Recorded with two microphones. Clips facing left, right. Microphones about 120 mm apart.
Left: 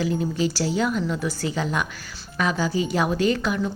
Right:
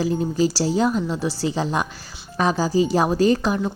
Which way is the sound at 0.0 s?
35° right (ahead or behind).